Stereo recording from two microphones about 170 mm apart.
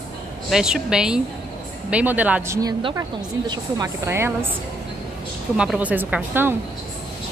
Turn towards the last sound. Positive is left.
turn(degrees=-10)  # may be behind; listen again after turning